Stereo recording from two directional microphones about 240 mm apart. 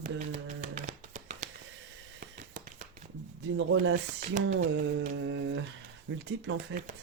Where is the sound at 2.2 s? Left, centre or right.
Right.